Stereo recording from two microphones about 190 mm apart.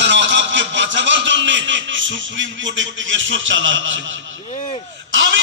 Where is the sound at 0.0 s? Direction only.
70° right (ahead or behind).